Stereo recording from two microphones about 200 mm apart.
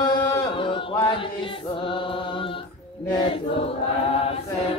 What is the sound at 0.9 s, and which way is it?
Music, 20° left (ahead or behind).